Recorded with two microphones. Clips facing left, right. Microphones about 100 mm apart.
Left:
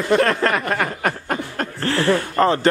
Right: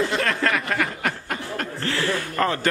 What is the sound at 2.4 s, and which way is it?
Speech, 25° left (ahead or behind).